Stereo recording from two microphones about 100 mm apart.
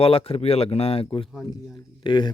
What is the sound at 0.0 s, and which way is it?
Speech, 75° left (ahead or behind).